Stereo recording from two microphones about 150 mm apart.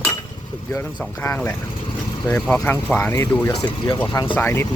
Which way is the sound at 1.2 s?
15° left (ahead or behind).